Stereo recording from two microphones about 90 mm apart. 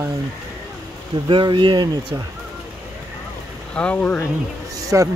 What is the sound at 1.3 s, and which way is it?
Speech, 65° right (ahead or behind).